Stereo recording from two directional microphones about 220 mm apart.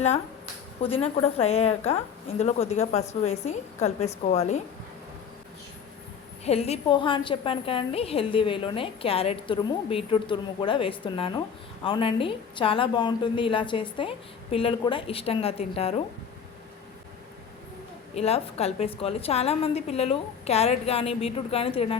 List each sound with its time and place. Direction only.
0.8 s a woman's voice: 25° left (ahead or behind)
6.4 s a woman's voice: 30° left (ahead or behind)
18.1 s a woman's voice: 30° left (ahead or behind)